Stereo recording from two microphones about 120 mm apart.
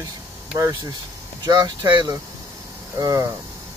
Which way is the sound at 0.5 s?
30° right (ahead or behind).